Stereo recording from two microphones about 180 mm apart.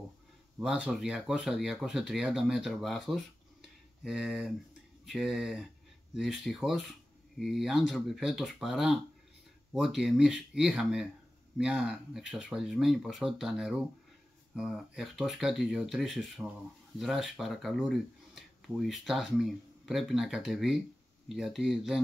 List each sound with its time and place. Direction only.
0.6 s speech: 5° right (ahead or behind)